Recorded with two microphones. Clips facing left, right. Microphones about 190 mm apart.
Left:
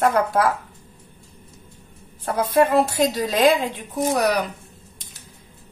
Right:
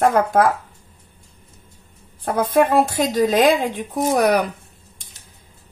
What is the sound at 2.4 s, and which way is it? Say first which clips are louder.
Speech: right 1 dB; 50° right (ahead or behind).